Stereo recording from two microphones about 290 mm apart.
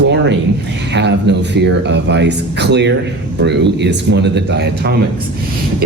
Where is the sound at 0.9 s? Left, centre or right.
Right.